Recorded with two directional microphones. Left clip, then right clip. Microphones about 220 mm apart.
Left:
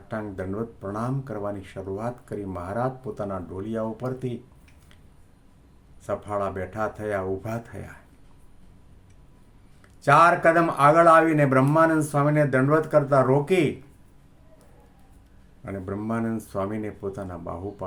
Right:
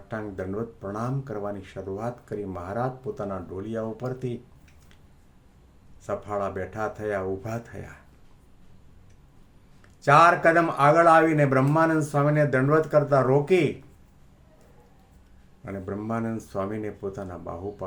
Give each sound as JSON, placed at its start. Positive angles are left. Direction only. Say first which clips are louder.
{"t": 0.1, "sound": "speech", "louder": "left 1 dB", "side_deg": 5}
{"t": 6.1, "sound": "speech", "louder": "left 1 dB", "side_deg": 5}
{"t": 10.0, "sound": "speech", "louder": "even", "side_deg": 5}
{"t": 15.6, "sound": "speech", "louder": "left 1 dB", "side_deg": 5}